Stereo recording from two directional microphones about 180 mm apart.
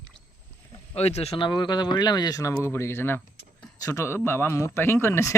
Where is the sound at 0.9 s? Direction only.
35° left (ahead or behind).